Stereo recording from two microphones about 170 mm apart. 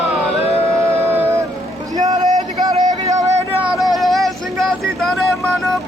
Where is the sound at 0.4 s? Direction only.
35° left (ahead or behind).